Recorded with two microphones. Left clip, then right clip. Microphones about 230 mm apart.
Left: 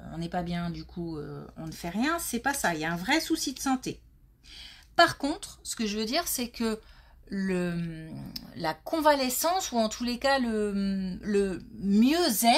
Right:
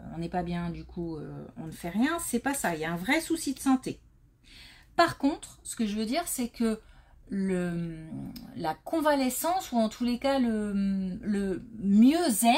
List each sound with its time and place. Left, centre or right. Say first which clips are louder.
0.0 s a woman's voice: even; left
4.9 s a woman's voice: left 2 dB; left